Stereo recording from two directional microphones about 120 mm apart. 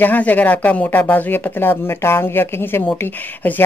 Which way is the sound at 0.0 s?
15° left (ahead or behind).